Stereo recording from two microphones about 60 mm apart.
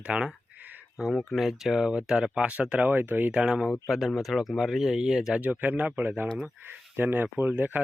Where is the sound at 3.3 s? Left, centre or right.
Centre.